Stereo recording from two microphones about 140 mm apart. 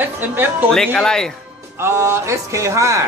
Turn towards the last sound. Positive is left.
turn(degrees=-20)  # may be behind; listen again after turning